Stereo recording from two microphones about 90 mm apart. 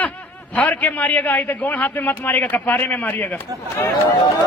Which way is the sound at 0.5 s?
15° left (ahead or behind).